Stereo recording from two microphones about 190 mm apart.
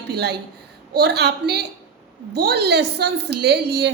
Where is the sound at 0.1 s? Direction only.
60° right (ahead or behind).